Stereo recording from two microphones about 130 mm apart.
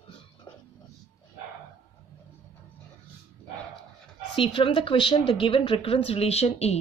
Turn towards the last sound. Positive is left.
turn(degrees=55)  # may be behind; listen again after turning